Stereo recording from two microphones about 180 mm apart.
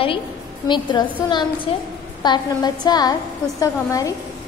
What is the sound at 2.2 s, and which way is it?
A woman's voice, 25° left (ahead or behind).